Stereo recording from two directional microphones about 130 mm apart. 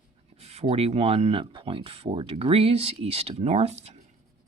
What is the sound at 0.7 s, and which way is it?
Speech, 50° right (ahead or behind).